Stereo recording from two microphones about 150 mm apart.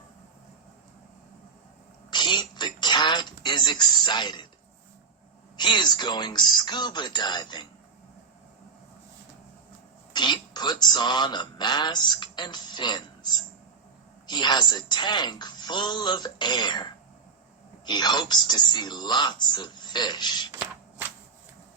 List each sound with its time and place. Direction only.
2.0 s a sound: 30° left (ahead or behind)
5.5 s speech: 30° left (ahead or behind)
10.1 s speech: 30° left (ahead or behind)